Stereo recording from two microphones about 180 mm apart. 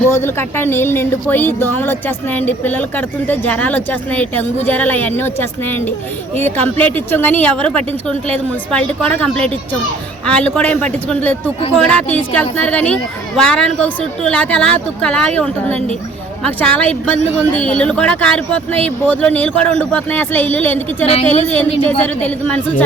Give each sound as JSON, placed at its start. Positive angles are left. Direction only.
{"t": 0.1, "sound": "speech", "side_deg": 15}